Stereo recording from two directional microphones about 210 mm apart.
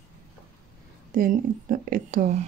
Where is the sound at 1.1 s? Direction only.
40° right (ahead or behind).